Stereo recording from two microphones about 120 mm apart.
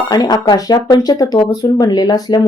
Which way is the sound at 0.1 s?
35° left (ahead or behind).